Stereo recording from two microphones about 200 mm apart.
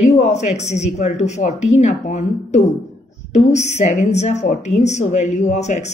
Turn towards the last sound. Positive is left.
turn(degrees=35)  # may be behind; listen again after turning